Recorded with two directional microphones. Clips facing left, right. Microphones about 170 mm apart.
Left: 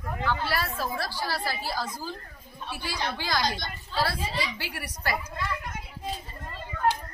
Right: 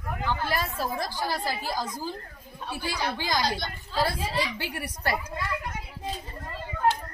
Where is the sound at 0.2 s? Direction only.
15° right (ahead or behind).